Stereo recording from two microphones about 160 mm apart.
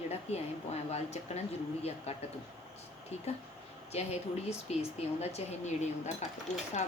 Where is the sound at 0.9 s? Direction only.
40° left (ahead or behind).